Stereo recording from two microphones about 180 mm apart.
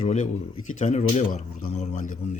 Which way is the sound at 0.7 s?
40° left (ahead or behind).